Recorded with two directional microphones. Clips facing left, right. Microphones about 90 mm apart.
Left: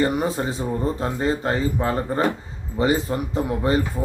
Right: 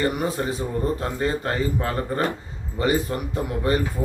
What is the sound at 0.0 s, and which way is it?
Speech, 20° left (ahead or behind).